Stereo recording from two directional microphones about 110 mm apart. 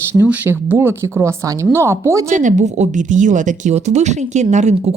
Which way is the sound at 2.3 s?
90° right.